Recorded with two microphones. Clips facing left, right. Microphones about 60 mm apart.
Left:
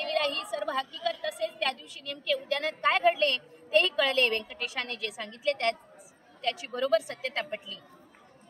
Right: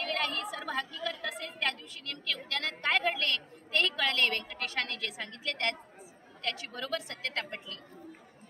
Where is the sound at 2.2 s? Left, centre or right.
Centre.